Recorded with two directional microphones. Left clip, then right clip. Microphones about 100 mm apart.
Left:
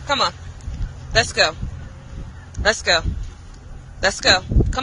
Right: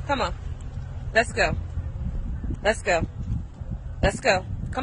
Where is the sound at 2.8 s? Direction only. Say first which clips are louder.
Left 5 dB; 25° right (ahead or behind).